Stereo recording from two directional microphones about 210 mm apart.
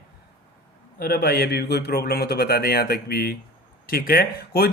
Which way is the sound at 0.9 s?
45° left (ahead or behind).